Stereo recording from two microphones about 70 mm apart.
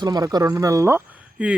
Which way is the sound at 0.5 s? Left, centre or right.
Right.